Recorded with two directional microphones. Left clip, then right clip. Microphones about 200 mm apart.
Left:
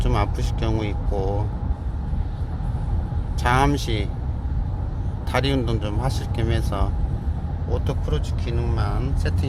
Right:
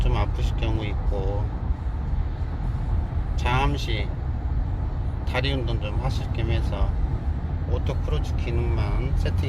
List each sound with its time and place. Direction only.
0.0 s a sound: 30° left (ahead or behind)
3.4 s speech: 30° left (ahead or behind)
5.3 s speech: 30° left (ahead or behind)